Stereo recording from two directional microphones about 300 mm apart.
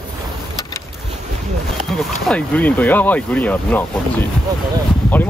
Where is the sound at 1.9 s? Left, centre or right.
Centre.